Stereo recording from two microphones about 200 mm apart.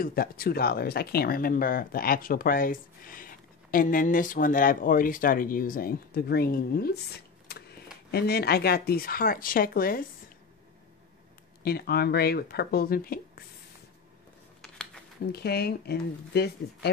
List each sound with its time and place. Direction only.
0.0 s speech: 50° left (ahead or behind)
11.6 s speech: 50° left (ahead or behind)
15.3 s speech: 50° left (ahead or behind)